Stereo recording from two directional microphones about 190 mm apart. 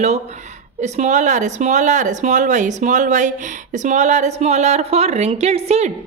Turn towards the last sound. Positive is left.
turn(degrees=-35)  # may be behind; listen again after turning